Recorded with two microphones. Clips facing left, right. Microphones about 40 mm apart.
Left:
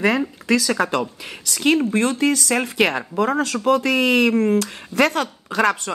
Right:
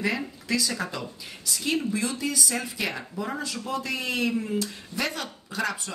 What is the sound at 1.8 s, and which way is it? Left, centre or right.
Speech, left.